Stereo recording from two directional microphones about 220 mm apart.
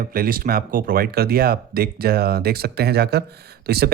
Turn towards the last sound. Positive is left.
turn(degrees=-45)  # may be behind; listen again after turning